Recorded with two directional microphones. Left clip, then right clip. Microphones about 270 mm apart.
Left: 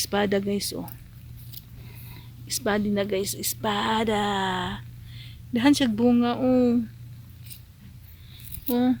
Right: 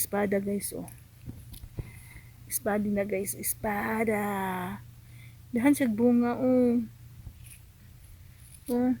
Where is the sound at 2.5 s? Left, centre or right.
Centre.